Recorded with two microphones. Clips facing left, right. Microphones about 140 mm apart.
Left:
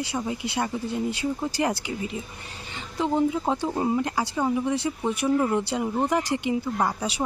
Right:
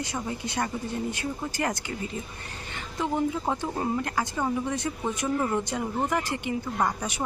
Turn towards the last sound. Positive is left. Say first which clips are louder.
# left 2 dB
turn(degrees=10)  # may be behind; listen again after turning